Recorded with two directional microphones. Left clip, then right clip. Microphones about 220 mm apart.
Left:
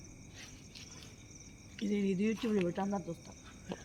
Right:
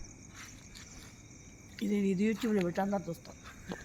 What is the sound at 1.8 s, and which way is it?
Speech, 55° right (ahead or behind).